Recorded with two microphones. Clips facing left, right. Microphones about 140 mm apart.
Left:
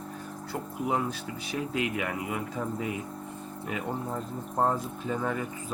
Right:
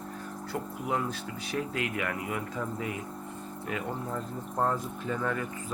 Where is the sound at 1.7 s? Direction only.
20° left (ahead or behind).